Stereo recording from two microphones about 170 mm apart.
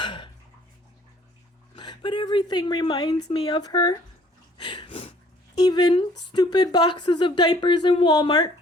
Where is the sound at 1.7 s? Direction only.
25° left (ahead or behind).